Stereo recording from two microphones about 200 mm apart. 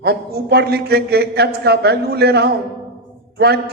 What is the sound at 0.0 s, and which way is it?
A man's voice, 55° right (ahead or behind).